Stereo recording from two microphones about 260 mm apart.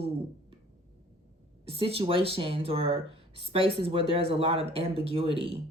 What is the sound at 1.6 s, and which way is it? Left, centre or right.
Speech, right.